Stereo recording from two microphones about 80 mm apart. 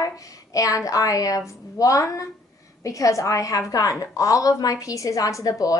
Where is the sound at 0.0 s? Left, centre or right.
Left.